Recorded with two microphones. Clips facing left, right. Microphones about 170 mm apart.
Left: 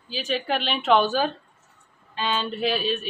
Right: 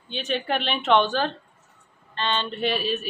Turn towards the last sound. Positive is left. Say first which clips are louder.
# left 1 dB
turn(degrees=0)  # may be behind; listen again after turning